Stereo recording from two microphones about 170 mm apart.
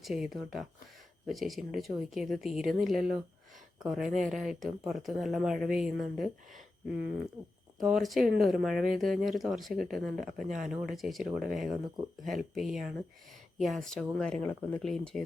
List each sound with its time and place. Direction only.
0.0 s speech: centre (ahead or behind)
7.8 s speech: centre (ahead or behind)